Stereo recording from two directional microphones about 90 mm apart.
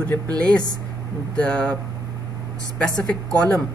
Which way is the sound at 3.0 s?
5° left (ahead or behind).